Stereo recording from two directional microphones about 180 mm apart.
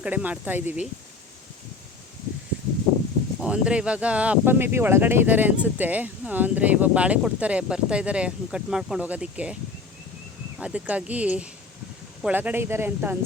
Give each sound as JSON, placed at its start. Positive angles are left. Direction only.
{"t": 0.0, "sound": "speech", "side_deg": -5}
{"t": 3.4, "sound": "speech", "side_deg": -5}
{"t": 10.6, "sound": "speech", "side_deg": -5}